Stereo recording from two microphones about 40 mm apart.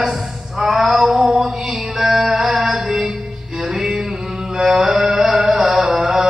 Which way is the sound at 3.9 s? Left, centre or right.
Centre.